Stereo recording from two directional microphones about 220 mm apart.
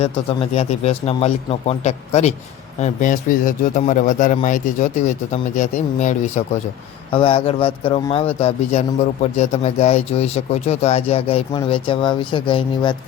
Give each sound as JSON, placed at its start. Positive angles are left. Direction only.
{"t": 0.0, "sound": "a man's voice", "side_deg": 30}